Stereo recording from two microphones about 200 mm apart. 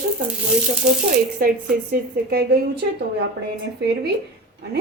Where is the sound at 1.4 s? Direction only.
45° right (ahead or behind).